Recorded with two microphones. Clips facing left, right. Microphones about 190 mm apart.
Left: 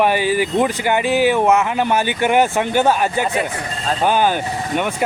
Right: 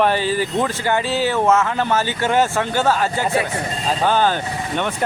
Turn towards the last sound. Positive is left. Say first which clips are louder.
# left 2 dB
turn(degrees=10)  # may be behind; listen again after turning